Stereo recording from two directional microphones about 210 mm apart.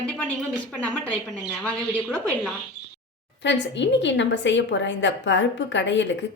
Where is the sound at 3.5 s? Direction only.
55° left (ahead or behind).